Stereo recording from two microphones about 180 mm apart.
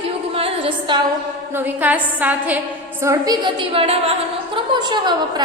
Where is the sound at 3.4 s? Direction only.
30° right (ahead or behind).